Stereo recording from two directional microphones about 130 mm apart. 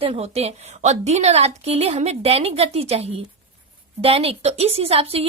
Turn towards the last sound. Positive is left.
turn(degrees=-50)  # may be behind; listen again after turning